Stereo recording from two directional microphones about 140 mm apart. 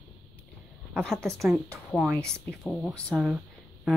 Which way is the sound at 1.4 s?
Centre (ahead or behind).